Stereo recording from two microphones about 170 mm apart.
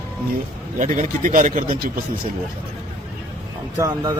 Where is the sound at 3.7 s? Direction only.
20° right (ahead or behind).